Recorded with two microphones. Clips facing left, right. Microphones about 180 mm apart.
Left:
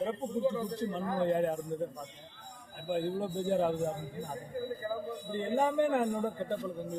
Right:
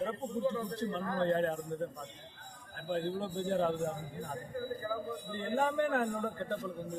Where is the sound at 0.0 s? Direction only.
15° left (ahead or behind).